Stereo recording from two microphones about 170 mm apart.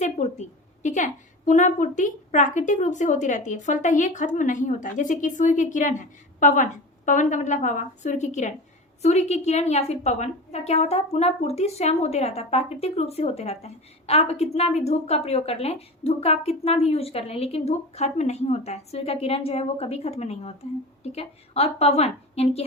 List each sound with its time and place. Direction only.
0.0 s a woman's voice: 45° left (ahead or behind)